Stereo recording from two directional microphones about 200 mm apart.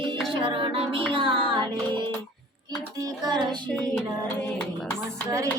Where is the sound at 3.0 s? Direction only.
20° right (ahead or behind).